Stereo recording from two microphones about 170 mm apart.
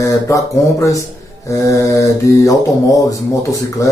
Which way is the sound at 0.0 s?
20° left (ahead or behind).